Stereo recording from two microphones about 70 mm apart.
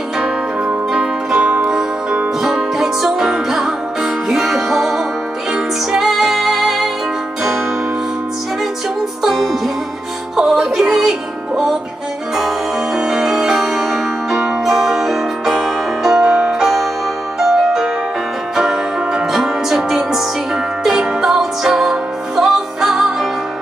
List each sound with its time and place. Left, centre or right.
0.2 s music: centre
9.2 s music: centre